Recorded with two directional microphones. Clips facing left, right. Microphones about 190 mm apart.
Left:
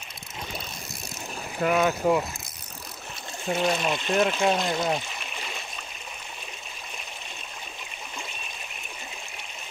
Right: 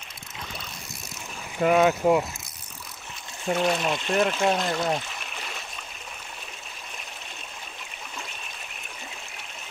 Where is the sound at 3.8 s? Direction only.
Centre (ahead or behind).